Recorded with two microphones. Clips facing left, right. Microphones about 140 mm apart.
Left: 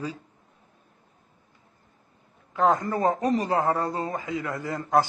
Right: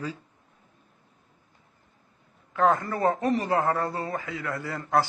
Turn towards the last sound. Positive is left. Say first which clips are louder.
# left 2 dB
turn(degrees=20)  # may be behind; listen again after turning